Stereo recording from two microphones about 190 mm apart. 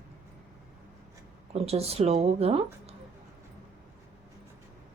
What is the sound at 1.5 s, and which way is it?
A woman's voice, 30° right (ahead or behind).